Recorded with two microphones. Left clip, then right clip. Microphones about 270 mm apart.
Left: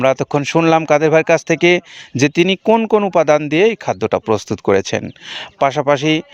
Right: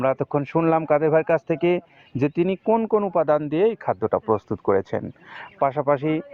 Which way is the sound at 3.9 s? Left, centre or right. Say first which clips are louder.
Left 5 dB; left.